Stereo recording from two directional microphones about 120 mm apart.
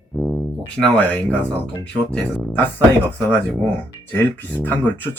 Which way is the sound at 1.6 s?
10° left (ahead or behind).